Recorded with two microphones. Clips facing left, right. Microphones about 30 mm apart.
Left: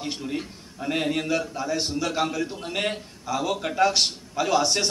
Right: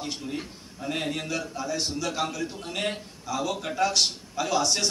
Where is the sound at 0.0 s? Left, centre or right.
Centre.